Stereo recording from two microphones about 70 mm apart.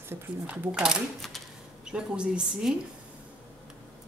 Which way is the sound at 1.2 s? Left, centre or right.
Centre.